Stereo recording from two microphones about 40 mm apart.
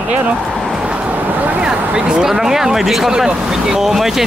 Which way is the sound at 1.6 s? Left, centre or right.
Right.